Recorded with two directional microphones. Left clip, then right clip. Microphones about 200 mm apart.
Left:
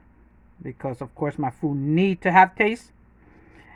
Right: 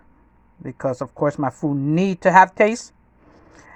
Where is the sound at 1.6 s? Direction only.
15° right (ahead or behind).